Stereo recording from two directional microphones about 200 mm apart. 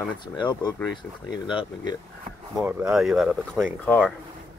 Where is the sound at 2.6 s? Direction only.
5° right (ahead or behind).